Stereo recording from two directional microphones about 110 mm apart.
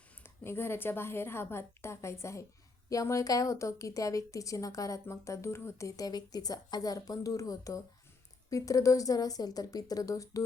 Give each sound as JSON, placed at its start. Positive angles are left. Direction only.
{"t": 0.2, "sound": "a woman's voice", "side_deg": 20}